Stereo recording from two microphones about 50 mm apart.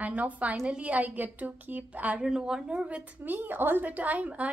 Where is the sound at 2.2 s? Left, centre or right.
Centre.